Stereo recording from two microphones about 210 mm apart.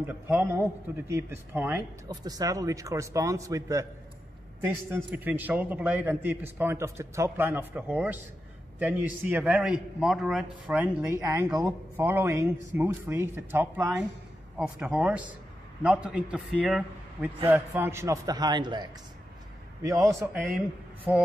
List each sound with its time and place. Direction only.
0.0 s a man's voice: 10° right (ahead or behind)
20.4 s speech: 5° right (ahead or behind)